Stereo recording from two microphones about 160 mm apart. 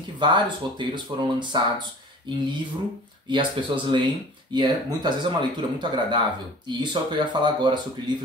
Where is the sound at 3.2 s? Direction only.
30° right (ahead or behind).